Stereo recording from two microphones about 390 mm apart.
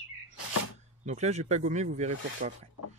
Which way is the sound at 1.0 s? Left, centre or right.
Centre.